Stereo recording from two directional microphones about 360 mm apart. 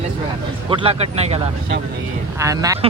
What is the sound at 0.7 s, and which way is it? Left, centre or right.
Speech, centre.